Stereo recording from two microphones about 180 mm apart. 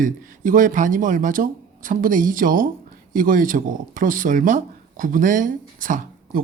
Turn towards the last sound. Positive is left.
turn(degrees=-50)  # may be behind; listen again after turning